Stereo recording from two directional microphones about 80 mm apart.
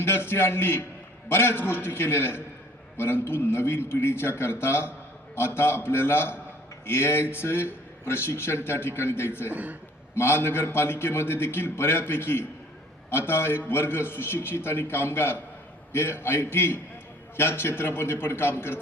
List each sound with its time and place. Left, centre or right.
0.0 s a man's voice: left
9.5 s a man's voice: right
10.2 s a man's voice: left